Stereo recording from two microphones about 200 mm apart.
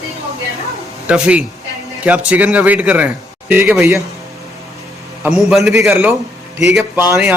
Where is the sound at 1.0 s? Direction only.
5° right (ahead or behind).